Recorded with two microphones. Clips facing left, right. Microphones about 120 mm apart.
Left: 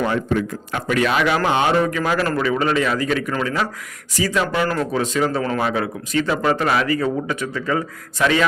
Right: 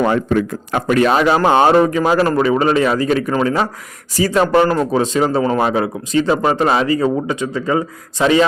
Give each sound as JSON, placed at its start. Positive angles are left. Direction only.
{"t": 0.0, "sound": "a man's voice", "side_deg": -55}
{"t": 0.9, "sound": "speech", "side_deg": -35}
{"t": 4.6, "sound": "speech", "side_deg": -25}